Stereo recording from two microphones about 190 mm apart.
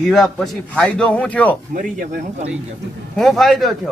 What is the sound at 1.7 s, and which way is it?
Speech, 45° right (ahead or behind).